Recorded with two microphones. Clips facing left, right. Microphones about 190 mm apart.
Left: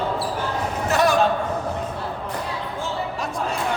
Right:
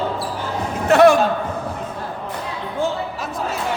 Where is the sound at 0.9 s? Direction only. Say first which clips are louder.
Right 9 dB; 65° right (ahead or behind).